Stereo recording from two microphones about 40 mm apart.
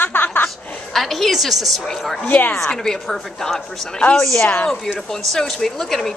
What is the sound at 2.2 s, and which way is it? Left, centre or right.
Speech, left.